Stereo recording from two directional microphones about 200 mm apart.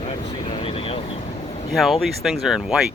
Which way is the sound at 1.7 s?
Centre (ahead or behind).